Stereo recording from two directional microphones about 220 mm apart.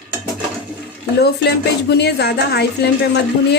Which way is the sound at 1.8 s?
50° left (ahead or behind).